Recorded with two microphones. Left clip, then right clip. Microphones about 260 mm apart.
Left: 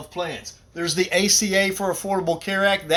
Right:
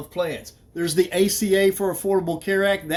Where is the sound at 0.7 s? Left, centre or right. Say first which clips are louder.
Even; centre.